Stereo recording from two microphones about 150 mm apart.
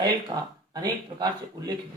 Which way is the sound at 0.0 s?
30° right (ahead or behind).